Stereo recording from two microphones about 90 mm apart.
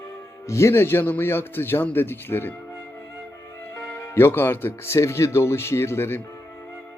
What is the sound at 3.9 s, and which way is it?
Speech, 25° left (ahead or behind).